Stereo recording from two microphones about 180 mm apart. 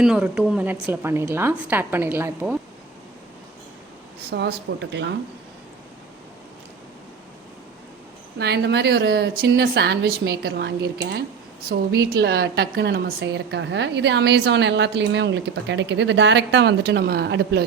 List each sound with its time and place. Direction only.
0.0 s a woman's voice: 5° right (ahead or behind)
4.3 s a woman's voice: 70° right (ahead or behind)
8.4 s a woman's voice: 65° right (ahead or behind)